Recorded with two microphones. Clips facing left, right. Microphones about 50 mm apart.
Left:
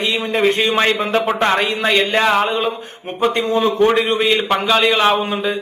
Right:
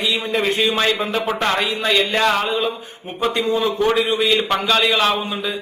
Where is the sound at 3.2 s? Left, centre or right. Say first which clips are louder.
Left 3 dB; centre.